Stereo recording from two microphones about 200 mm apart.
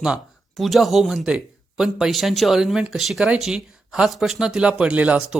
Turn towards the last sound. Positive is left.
turn(degrees=-5)  # may be behind; listen again after turning